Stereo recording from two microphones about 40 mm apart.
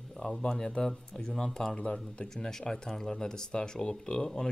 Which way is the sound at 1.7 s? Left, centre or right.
Left.